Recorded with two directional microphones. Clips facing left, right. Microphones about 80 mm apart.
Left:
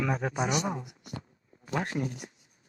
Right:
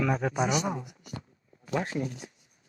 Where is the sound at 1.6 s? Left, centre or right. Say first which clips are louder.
Right 1 dB; left.